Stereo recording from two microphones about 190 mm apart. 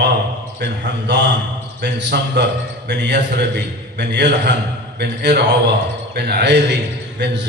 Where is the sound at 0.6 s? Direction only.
65° right (ahead or behind).